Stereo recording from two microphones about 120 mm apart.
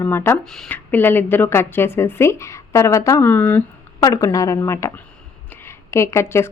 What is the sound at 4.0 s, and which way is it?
A woman's voice, 30° left (ahead or behind).